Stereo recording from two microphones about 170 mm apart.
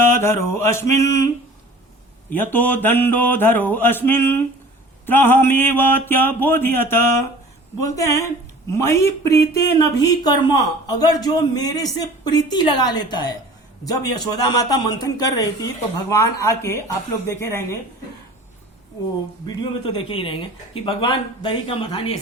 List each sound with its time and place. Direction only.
0.0 s mantra: 15° left (ahead or behind)
2.3 s mantra: 10° left (ahead or behind)
7.9 s speech: 20° left (ahead or behind)
17.2 s mantra: 15° left (ahead or behind)
19.5 s speech: 25° left (ahead or behind)